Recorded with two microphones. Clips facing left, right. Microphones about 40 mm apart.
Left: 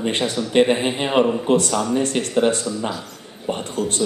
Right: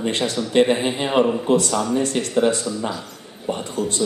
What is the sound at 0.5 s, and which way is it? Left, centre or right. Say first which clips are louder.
A man's voice: even; centre.